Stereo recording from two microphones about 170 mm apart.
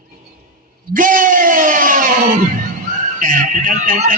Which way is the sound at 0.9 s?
55° right (ahead or behind).